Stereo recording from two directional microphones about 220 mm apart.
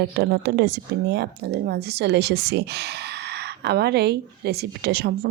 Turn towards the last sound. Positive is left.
turn(degrees=-45)  # may be behind; listen again after turning